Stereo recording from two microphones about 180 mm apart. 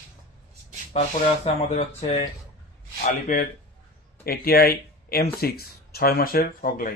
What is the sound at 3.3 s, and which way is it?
Speech, 45° left (ahead or behind).